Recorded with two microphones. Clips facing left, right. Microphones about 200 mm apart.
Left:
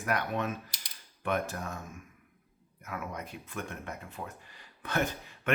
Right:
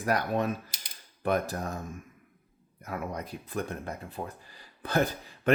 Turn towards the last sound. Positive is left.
turn(degrees=-35)  # may be behind; listen again after turning